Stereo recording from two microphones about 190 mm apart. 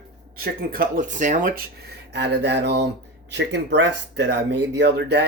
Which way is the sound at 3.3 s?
65° right (ahead or behind).